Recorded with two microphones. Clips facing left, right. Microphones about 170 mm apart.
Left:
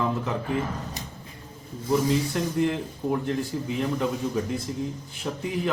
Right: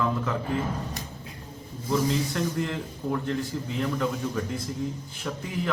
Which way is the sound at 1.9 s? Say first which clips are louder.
Left 2 dB; 20° left (ahead or behind).